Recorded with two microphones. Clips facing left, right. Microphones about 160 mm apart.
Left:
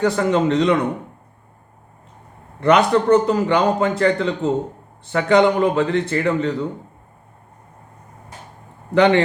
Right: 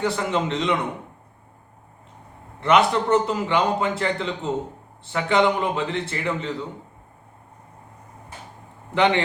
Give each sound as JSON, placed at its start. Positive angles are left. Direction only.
{"t": 0.0, "sound": "a man's voice", "side_deg": 45}
{"t": 2.6, "sound": "a man's voice", "side_deg": 45}
{"t": 9.0, "sound": "a man's voice", "side_deg": 45}